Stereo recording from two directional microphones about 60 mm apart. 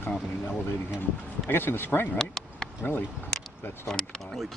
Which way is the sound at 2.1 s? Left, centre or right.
Centre.